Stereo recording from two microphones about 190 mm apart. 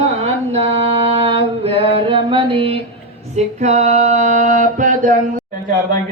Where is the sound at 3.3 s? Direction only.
35° right (ahead or behind).